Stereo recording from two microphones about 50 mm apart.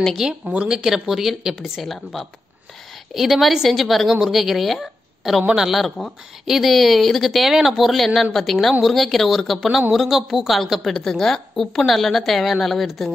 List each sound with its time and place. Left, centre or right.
0.3 s speech: right
0.7 s a woman's voice: centre